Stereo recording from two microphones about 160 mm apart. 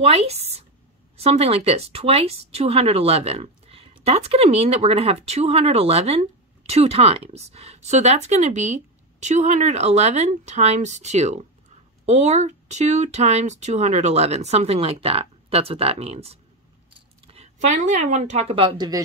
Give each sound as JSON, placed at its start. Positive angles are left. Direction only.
{"t": 0.0, "sound": "speech", "side_deg": -40}